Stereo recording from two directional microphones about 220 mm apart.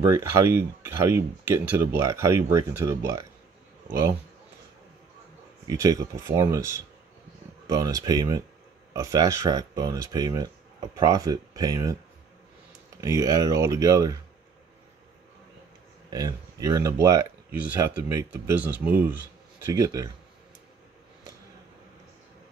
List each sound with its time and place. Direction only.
0.0 s speech: 10° right (ahead or behind)
5.7 s speech: 15° right (ahead or behind)
13.0 s speech: 15° right (ahead or behind)
16.1 s speech: 15° right (ahead or behind)